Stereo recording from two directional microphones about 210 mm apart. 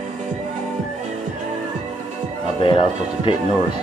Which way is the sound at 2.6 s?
25° left (ahead or behind).